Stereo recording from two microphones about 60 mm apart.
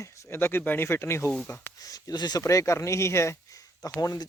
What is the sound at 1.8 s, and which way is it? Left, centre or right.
Speech, left.